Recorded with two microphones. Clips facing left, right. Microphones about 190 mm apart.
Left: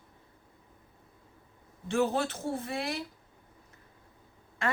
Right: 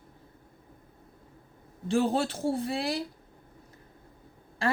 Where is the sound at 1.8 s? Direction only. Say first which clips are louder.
Right 2 dB; 30° right (ahead or behind).